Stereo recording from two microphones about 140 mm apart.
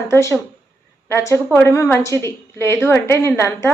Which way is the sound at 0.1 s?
20° left (ahead or behind).